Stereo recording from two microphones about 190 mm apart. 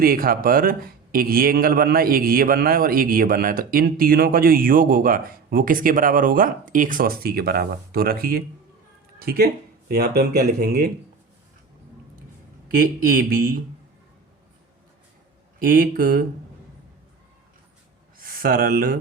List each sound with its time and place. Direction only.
0.0 s a man's voice: 50° right (ahead or behind)
12.7 s a man's voice: 50° right (ahead or behind)
15.5 s a man's voice: 50° right (ahead or behind)
18.2 s speech: 50° right (ahead or behind)